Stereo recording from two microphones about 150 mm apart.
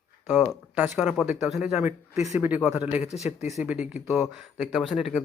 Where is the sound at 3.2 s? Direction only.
50° left (ahead or behind).